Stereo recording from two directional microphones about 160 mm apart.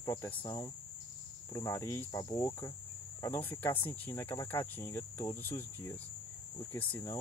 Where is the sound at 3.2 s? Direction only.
15° left (ahead or behind).